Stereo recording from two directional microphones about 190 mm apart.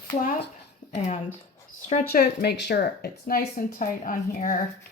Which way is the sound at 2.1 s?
60° left (ahead or behind).